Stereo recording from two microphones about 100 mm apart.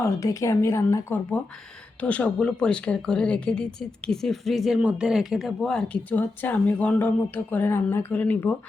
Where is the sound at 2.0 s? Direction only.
15° left (ahead or behind).